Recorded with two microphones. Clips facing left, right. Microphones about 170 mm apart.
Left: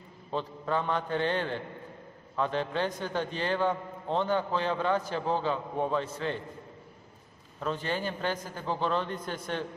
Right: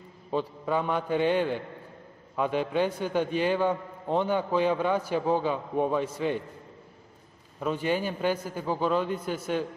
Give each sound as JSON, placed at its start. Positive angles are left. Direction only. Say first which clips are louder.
{"t": 0.3, "sound": "a man's voice", "louder": "right 3 dB", "side_deg": -10}
{"t": 7.6, "sound": "a man's voice", "louder": "right 4 dB", "side_deg": -10}